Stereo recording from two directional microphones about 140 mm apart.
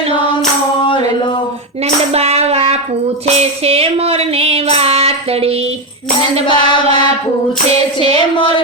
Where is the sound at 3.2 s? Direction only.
50° right (ahead or behind).